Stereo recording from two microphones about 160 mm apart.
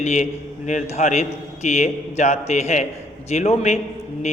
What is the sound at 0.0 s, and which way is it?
A man's voice, 45° left (ahead or behind).